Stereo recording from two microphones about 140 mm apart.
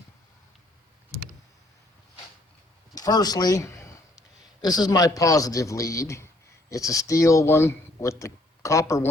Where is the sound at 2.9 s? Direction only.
25° left (ahead or behind).